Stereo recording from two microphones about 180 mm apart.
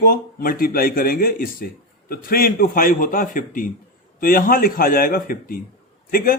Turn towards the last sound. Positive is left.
turn(degrees=50)  # may be behind; listen again after turning